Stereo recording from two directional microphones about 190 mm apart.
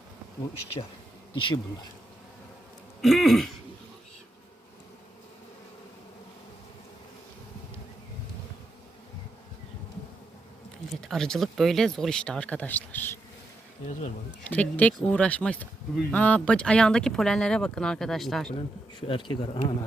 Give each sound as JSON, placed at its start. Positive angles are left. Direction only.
{"t": 1.3, "sound": "speech", "side_deg": 25}
{"t": 3.0, "sound": "speech", "side_deg": 0}
{"t": 11.0, "sound": "speech", "side_deg": 0}
{"t": 14.5, "sound": "speech", "side_deg": 5}
{"t": 18.5, "sound": "speech", "side_deg": 25}